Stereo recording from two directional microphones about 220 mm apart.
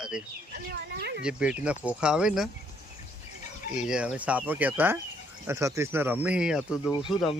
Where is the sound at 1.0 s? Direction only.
50° right (ahead or behind).